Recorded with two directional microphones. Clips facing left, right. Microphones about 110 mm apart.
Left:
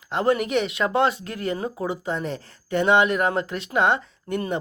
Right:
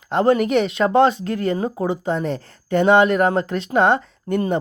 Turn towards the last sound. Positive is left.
turn(degrees=-35)  # may be behind; listen again after turning